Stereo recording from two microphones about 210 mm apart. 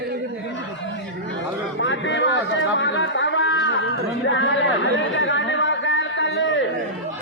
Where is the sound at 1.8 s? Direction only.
60° left (ahead or behind).